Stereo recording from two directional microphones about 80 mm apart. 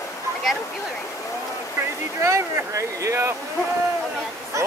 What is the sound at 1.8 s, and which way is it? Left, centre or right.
Speech, right.